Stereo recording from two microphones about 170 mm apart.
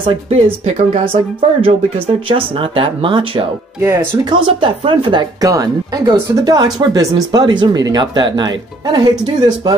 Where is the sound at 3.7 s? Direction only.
15° right (ahead or behind).